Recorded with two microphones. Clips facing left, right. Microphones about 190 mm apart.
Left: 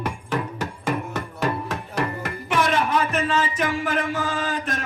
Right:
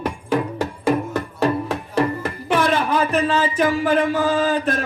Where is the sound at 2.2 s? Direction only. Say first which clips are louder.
Right 4 dB; 30° right (ahead or behind).